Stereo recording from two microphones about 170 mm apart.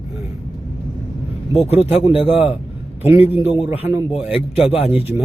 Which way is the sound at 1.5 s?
35° left (ahead or behind).